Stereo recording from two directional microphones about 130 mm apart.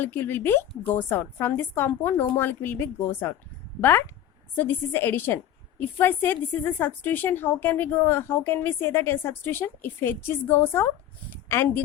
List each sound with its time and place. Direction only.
0.0 s a woman's voice: 15° left (ahead or behind)